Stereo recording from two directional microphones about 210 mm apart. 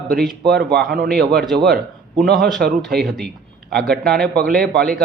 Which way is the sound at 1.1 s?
Centre (ahead or behind).